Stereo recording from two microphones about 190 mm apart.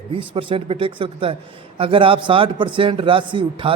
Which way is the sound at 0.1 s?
25° right (ahead or behind).